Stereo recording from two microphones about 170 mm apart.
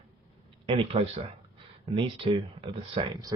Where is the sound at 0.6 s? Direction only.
35° right (ahead or behind).